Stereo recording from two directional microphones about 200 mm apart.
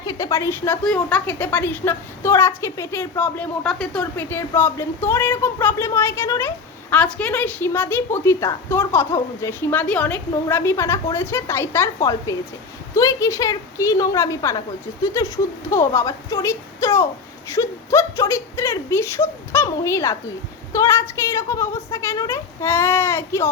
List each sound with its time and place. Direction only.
0.0 s a woman's voice: 15° left (ahead or behind)